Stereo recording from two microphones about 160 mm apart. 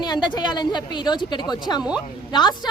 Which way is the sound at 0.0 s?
30° left (ahead or behind).